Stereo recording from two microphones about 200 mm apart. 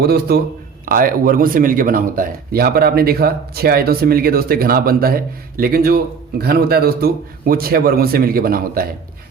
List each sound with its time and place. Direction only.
0.0 s speech: 50° right (ahead or behind)